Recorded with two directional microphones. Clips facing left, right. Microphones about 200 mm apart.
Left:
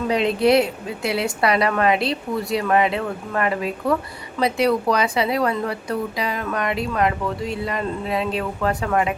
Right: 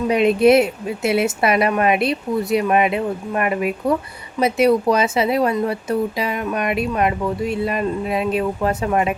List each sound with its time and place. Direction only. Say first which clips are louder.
0.1 s a woman's voice: right 4 dB; 20° right (ahead or behind)